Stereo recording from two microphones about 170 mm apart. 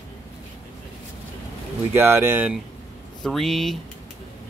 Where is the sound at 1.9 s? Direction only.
15° right (ahead or behind).